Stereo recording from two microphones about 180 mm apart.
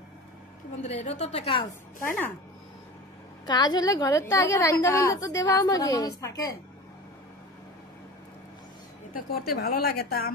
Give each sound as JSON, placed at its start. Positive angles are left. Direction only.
{"t": 0.8, "sound": "a woman's voice", "side_deg": 40}
{"t": 3.4, "sound": "a woman's voice", "side_deg": 25}
{"t": 9.1, "sound": "a woman's voice", "side_deg": 60}